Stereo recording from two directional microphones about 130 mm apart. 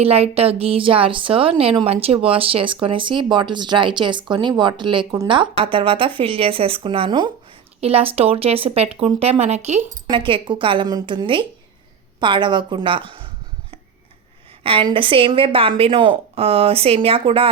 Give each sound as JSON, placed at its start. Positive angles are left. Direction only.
{"t": 0.0, "sound": "a woman's voice", "side_deg": -50}
{"t": 10.1, "sound": "speech", "side_deg": -40}
{"t": 14.6, "sound": "a woman's voice", "side_deg": -45}